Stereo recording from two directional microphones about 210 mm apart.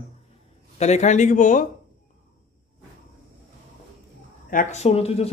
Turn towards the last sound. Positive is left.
turn(degrees=30)  # may be behind; listen again after turning